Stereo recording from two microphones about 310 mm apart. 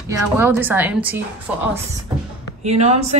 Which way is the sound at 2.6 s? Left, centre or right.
Right.